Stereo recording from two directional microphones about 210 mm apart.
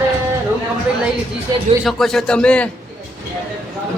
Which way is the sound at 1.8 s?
Centre (ahead or behind).